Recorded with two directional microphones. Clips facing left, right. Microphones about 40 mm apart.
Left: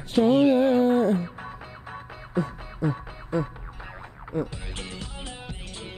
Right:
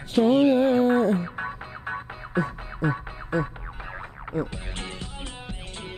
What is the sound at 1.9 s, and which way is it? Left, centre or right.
Music, right.